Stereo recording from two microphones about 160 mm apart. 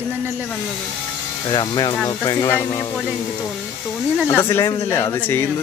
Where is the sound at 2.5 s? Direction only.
10° left (ahead or behind).